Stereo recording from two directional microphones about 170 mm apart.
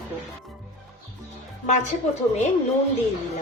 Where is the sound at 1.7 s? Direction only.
45° left (ahead or behind).